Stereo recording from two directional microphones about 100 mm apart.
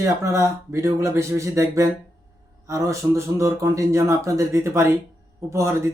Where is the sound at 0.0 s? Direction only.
30° right (ahead or behind).